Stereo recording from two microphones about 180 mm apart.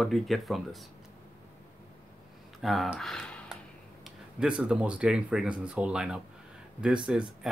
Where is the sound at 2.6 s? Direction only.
Centre (ahead or behind).